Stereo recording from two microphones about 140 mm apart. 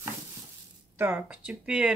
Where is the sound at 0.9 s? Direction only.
15° right (ahead or behind).